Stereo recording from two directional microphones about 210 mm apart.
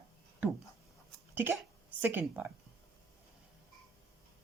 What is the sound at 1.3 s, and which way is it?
A woman's voice, 10° right (ahead or behind).